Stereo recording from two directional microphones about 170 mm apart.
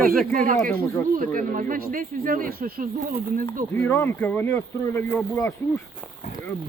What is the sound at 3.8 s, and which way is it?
Speech, 15° left (ahead or behind).